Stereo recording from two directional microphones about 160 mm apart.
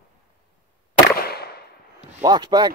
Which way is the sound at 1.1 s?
75° left (ahead or behind).